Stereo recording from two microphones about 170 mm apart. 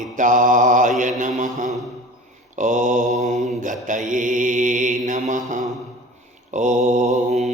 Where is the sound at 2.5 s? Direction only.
50° right (ahead or behind).